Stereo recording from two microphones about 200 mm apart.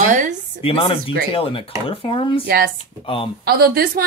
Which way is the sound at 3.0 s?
25° left (ahead or behind).